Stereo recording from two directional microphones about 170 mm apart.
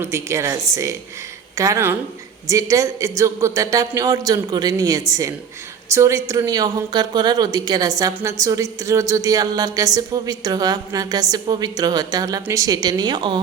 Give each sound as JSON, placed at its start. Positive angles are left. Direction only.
{"t": 0.0, "sound": "a woman's voice", "side_deg": -15}